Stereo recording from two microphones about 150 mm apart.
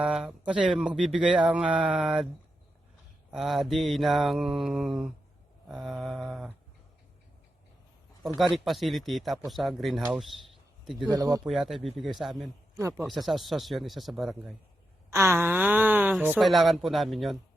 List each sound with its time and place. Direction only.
0.0 s speech: 5° right (ahead or behind)
3.3 s speech: centre (ahead or behind)
8.4 s speech: centre (ahead or behind)
11.1 s speech: 25° right (ahead or behind)
11.4 s speech: centre (ahead or behind)
15.1 s wail: 15° right (ahead or behind)
16.4 s speech: centre (ahead or behind)